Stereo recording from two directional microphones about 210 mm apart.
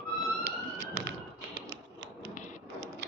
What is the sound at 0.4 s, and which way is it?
Vehicle, 55° right (ahead or behind).